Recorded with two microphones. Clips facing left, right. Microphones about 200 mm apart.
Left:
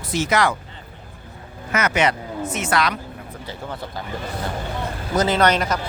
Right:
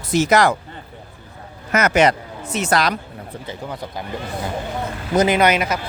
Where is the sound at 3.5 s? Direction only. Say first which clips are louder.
Right 1 dB; 20° right (ahead or behind).